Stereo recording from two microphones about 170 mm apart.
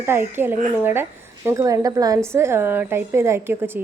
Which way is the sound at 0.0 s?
15° right (ahead or behind).